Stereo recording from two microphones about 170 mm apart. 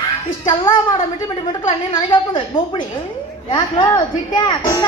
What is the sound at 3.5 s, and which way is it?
A woman's voice, 25° left (ahead or behind).